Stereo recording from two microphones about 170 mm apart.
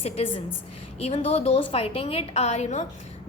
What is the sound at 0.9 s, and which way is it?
A woman's voice, 35° left (ahead or behind).